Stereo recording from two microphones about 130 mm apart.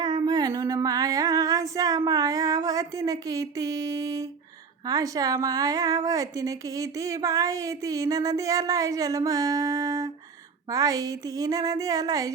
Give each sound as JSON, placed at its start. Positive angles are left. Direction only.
{"t": 0.0, "sound": "female singing", "side_deg": -35}
{"t": 4.9, "sound": "a woman's voice", "side_deg": -30}